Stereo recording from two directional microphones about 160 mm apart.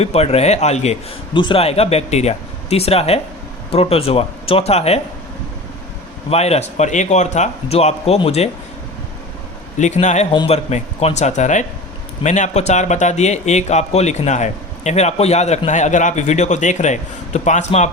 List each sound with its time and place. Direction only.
0.0 s speech: 40° left (ahead or behind)
1.3 s speech: 30° left (ahead or behind)
6.3 s speech: 40° left (ahead or behind)
9.7 s speech: 50° left (ahead or behind)